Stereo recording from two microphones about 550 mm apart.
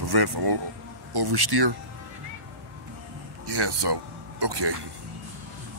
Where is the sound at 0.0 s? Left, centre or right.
Right.